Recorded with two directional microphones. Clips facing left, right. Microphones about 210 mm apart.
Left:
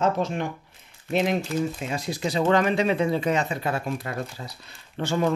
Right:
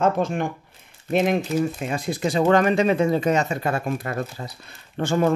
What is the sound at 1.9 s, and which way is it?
Speech, 55° right (ahead or behind).